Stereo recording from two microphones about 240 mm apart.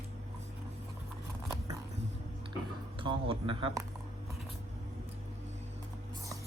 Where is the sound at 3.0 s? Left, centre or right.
Right.